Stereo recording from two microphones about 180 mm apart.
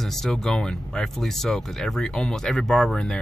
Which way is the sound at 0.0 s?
Centre (ahead or behind).